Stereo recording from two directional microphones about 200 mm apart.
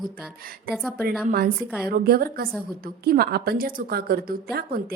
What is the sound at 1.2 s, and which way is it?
A woman's voice, 45° right (ahead or behind).